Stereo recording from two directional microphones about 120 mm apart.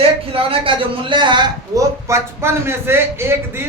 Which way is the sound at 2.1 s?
20° right (ahead or behind).